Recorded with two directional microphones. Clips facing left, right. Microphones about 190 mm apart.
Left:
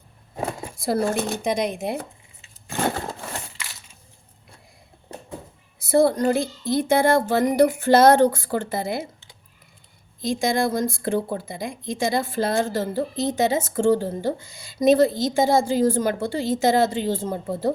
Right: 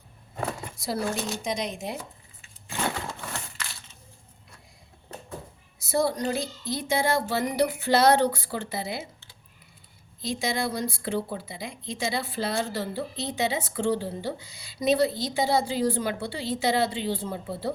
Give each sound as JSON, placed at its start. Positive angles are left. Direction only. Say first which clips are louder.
{"t": 0.8, "sound": "speech", "louder": "left 7 dB", "side_deg": 55}
{"t": 2.6, "sound": "crushing", "louder": "left 5 dB", "side_deg": 45}
{"t": 5.8, "sound": "speech", "louder": "left 7 dB", "side_deg": 55}
{"t": 10.2, "sound": "speech", "louder": "left 7 dB", "side_deg": 50}